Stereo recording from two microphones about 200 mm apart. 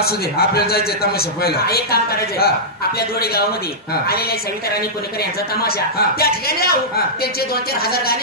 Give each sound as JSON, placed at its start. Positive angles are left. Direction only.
{"t": 0.0, "sound": "speech", "side_deg": 50}
{"t": 5.6, "sound": "speech", "side_deg": 50}